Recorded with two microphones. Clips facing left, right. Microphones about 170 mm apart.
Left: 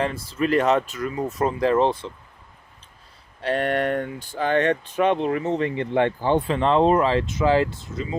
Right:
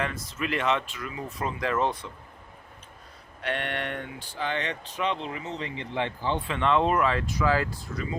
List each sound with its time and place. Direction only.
0.0 s speech: 30° left (ahead or behind)
3.4 s speech: 40° left (ahead or behind)
6.5 s speech: 35° left (ahead or behind)